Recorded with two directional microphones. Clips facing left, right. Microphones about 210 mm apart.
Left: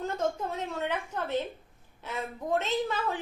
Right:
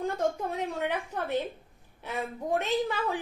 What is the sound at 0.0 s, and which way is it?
A woman's voice, 15° right (ahead or behind).